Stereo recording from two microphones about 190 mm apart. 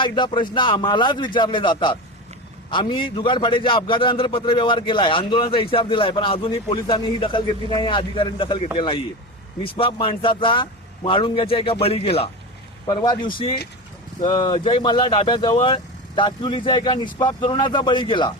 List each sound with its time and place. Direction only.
0.0 s a man's voice: 25° left (ahead or behind)